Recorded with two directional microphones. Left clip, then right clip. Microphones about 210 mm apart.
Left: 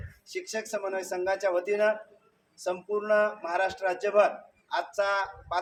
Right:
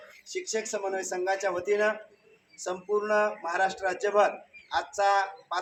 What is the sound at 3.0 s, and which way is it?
A man's voice, 20° left (ahead or behind).